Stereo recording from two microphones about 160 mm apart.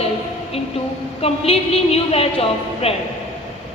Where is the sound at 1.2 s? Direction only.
40° left (ahead or behind).